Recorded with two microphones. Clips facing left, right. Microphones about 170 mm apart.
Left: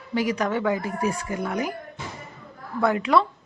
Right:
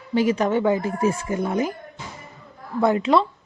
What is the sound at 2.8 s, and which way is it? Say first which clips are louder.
Speech: right 2 dB; 25° right (ahead or behind).